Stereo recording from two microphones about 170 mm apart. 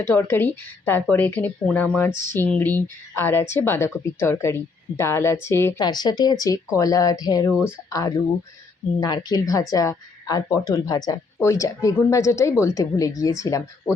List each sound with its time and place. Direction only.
0.0 s a woman's voice: 15° left (ahead or behind)